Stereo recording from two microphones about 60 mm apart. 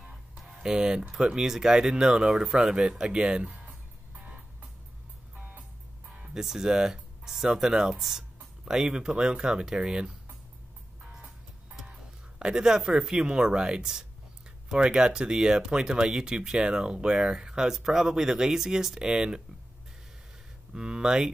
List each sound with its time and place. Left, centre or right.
0.4 s speech: centre
3.0 s music: centre
6.0 s speech: centre
11.0 s music: centre
14.7 s speech: centre
20.7 s speech: centre